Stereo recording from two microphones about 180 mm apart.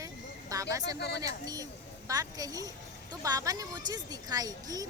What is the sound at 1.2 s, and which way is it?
A woman's voice, 20° right (ahead or behind).